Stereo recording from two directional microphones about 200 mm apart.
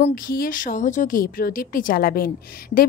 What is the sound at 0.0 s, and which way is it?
A woman's voice, 45° left (ahead or behind).